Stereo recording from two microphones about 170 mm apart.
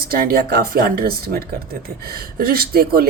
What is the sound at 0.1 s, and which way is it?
Speech, 60° right (ahead or behind).